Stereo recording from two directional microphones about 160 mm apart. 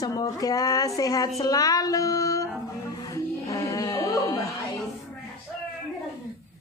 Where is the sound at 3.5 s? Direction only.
20° left (ahead or behind).